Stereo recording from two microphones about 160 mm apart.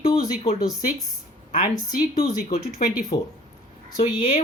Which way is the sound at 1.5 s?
65° left (ahead or behind).